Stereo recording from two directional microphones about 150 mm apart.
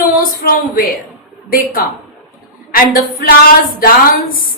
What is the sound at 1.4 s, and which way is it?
A woman's voice, 75° left (ahead or behind).